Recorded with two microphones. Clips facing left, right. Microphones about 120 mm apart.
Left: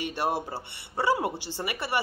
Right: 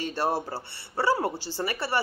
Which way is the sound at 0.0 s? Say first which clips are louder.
Right 1 dB; 15° left (ahead or behind).